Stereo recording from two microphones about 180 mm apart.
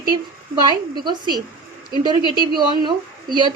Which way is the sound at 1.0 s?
25° right (ahead or behind).